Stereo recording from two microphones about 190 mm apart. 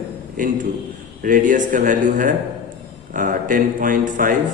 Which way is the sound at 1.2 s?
45° right (ahead or behind).